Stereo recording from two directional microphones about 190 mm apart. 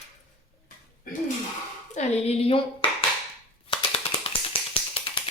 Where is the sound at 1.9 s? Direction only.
35° left (ahead or behind).